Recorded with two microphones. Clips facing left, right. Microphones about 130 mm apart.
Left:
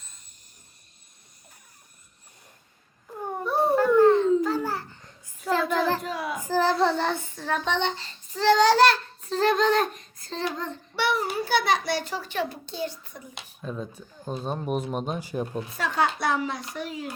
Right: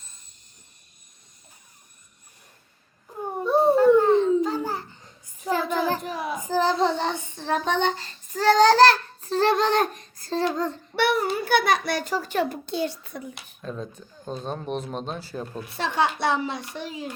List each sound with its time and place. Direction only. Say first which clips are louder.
3.4 s babbling: right 5 dB; 25° right (ahead or behind)
5.6 s child singing: even; 20° right (ahead or behind); by 8.4 s 45° right (ahead or behind)
9.2 s a sound: right 1 dB; 30° right (ahead or behind)
10.2 s a child's voice: right 6 dB; 35° right (ahead or behind)
10.9 s a child's voice: right 3 dB; 55° right (ahead or behind)
12.7 s a child's voice: right 5 dB; 75° right (ahead or behind)
13.6 s speech: even; 5° left (ahead or behind)
15.7 s a child's voice: right 2 dB; 25° right (ahead or behind)